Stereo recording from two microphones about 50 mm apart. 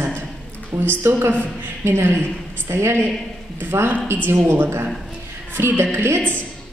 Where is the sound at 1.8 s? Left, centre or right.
Right.